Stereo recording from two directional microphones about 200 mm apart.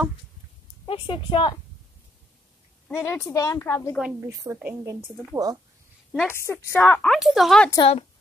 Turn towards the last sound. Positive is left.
turn(degrees=0)  # may be behind; listen again after turning